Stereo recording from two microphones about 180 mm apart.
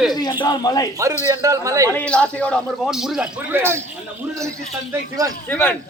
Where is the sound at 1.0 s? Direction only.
15° right (ahead or behind).